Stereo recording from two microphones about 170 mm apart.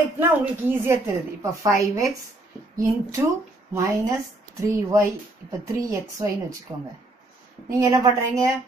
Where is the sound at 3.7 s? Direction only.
15° right (ahead or behind).